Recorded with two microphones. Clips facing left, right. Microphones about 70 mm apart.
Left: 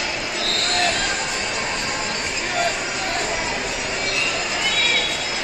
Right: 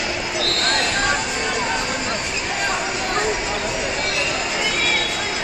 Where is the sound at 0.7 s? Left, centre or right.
Right.